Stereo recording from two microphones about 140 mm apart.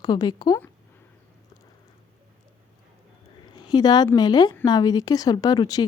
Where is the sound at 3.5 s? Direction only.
30° left (ahead or behind).